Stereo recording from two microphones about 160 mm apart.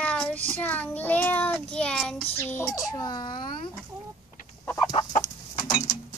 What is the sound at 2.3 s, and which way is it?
Child singing, 15° left (ahead or behind).